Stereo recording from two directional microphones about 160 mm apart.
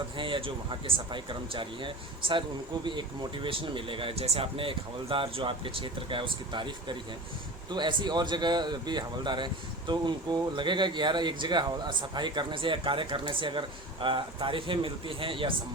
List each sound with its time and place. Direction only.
0.2 s speech: 30° right (ahead or behind)
3.4 s speech: 35° right (ahead or behind)